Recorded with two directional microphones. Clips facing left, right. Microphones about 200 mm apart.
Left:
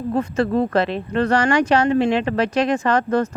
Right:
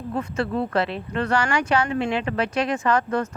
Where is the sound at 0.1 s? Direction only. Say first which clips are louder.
Left 6 dB; 40° left (ahead or behind).